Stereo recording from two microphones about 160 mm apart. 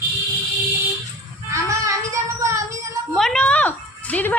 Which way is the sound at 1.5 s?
20° right (ahead or behind).